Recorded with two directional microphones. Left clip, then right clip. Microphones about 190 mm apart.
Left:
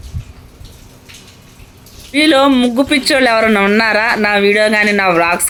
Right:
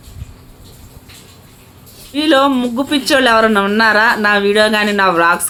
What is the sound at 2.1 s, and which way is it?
Speech, 15° left (ahead or behind).